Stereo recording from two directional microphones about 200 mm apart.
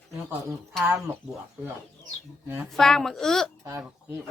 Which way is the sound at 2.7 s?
Centre (ahead or behind).